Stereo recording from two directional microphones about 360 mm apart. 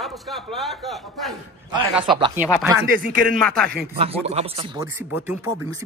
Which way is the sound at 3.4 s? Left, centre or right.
Centre.